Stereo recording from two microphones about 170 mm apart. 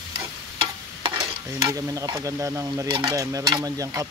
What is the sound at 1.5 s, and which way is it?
Speech, 20° right (ahead or behind).